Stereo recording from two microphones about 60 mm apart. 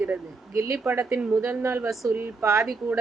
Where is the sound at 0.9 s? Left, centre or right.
Right.